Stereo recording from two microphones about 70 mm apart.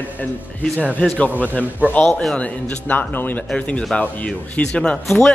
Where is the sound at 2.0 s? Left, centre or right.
Centre.